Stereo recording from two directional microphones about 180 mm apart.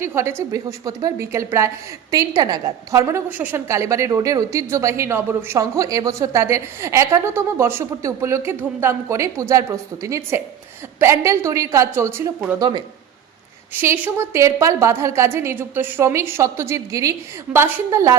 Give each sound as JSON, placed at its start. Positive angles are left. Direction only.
{"t": 0.0, "sound": "a woman's voice", "side_deg": -15}
{"t": 13.7, "sound": "a woman's voice", "side_deg": -10}